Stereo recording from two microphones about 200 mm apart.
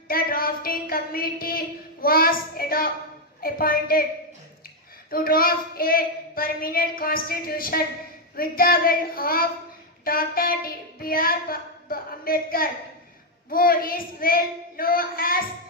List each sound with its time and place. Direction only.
0.1 s a woman's voice: 45° left (ahead or behind)
5.1 s a woman's voice: 45° left (ahead or behind)